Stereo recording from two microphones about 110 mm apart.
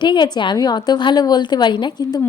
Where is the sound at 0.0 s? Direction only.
45° left (ahead or behind).